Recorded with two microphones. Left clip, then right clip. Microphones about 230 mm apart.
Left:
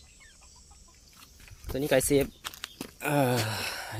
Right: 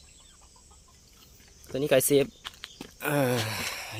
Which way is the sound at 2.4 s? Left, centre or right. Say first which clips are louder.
Left 2 dB; left.